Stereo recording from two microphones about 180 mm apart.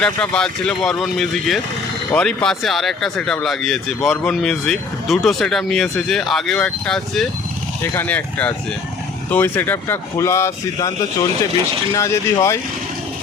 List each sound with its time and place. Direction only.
0.0 s speech: 5° left (ahead or behind)